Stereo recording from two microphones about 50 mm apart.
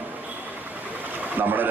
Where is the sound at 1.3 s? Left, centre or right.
Right.